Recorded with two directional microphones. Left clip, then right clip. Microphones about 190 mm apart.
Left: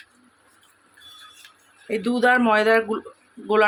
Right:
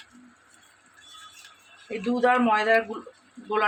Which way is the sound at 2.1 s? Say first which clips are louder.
Left 3 dB; 60° left (ahead or behind).